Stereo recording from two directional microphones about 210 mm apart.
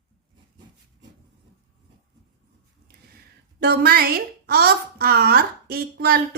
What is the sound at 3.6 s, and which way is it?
A woman's voice, 50° right (ahead or behind).